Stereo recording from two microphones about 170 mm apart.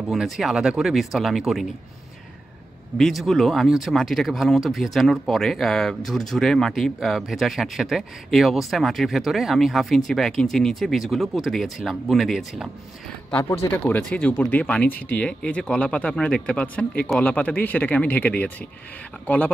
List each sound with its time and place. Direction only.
0.1 s speech: centre (ahead or behind)
3.0 s speech: centre (ahead or behind)
13.3 s speech: 15° left (ahead or behind)